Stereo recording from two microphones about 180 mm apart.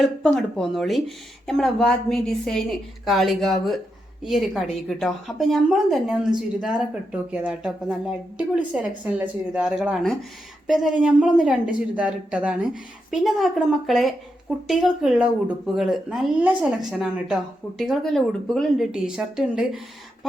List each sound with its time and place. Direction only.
0.0 s speech: centre (ahead or behind)